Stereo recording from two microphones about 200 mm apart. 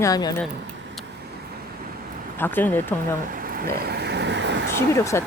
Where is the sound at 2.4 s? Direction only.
10° left (ahead or behind).